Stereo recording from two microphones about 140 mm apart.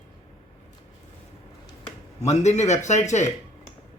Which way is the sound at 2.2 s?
55° left (ahead or behind).